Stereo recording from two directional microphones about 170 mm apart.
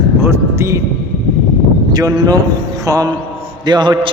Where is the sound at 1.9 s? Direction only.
20° right (ahead or behind).